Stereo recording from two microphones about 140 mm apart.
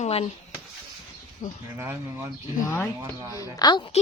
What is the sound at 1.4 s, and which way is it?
Speech, 60° left (ahead or behind).